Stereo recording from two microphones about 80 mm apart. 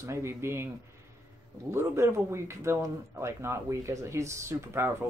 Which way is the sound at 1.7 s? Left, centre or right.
Right.